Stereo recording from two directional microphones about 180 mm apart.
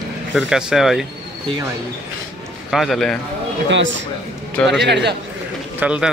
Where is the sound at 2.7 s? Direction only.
Centre (ahead or behind).